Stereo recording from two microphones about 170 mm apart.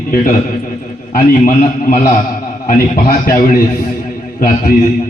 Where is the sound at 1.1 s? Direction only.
55° left (ahead or behind).